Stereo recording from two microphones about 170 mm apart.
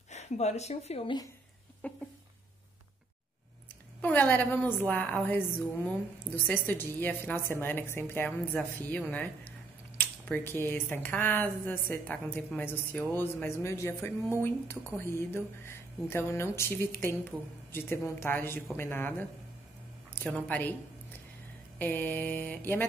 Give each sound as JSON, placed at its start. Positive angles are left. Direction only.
{"t": 0.1, "sound": "a woman's voice", "side_deg": 40}
{"t": 1.8, "sound": "a sound", "side_deg": 10}
{"t": 4.0, "sound": "a woman's voice", "side_deg": 10}
{"t": 6.4, "sound": "a woman's voice", "side_deg": 10}
{"t": 21.7, "sound": "a woman's voice", "side_deg": 10}